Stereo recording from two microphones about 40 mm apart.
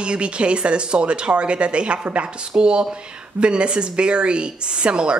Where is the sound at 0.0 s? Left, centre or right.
Right.